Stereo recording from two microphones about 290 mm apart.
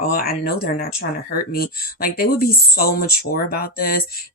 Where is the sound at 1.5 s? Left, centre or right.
Left.